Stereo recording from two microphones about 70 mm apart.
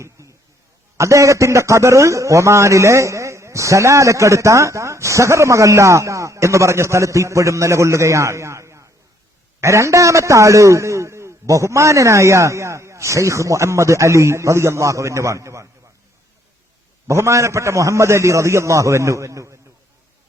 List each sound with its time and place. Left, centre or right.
0.2 s a sound: right
0.9 s a man's voice: right
17.1 s a man's voice: right